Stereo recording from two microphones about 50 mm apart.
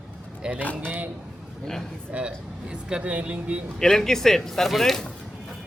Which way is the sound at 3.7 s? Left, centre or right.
Centre.